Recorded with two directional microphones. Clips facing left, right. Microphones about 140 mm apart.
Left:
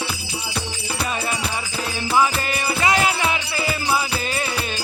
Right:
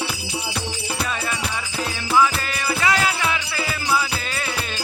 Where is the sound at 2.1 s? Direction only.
20° left (ahead or behind).